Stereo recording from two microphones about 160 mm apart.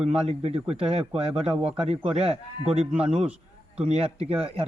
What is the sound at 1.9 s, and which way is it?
Speech, 40° right (ahead or behind).